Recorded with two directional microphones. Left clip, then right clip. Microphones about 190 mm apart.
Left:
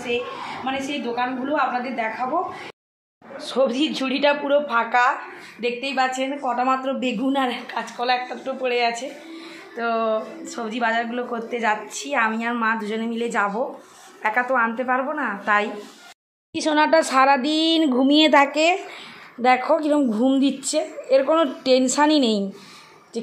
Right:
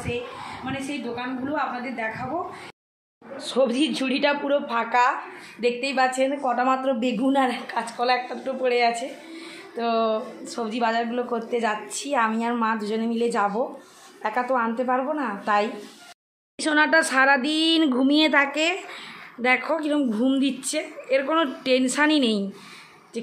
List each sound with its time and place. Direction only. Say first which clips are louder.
0.7 s a woman's voice: left 5 dB; 20° right (ahead or behind)
3.4 s a woman's voice: left 1 dB; centre (ahead or behind)
18.1 s a woman's voice: left 6 dB; 15° left (ahead or behind)